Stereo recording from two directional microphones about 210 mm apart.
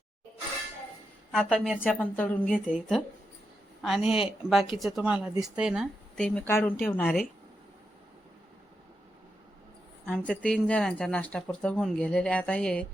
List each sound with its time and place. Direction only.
1.3 s speech: 5° left (ahead or behind)
2.6 s a woman's voice: 5° right (ahead or behind)
10.1 s speech: 5° left (ahead or behind)